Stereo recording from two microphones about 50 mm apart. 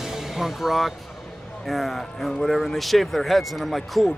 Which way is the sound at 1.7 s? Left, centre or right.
Centre.